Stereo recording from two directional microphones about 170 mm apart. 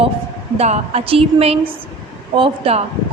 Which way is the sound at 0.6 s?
40° right (ahead or behind).